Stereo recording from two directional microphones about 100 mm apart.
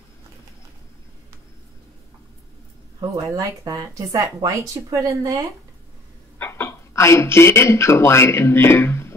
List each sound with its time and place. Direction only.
3.0 s speech: 35° right (ahead or behind)
6.3 s speech: 20° left (ahead or behind)